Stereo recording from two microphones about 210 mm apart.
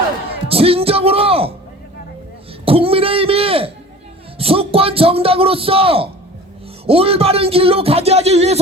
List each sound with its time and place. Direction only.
0.4 s speech: 25° right (ahead or behind)
2.6 s a sound: 25° right (ahead or behind)
6.8 s speech: 25° right (ahead or behind)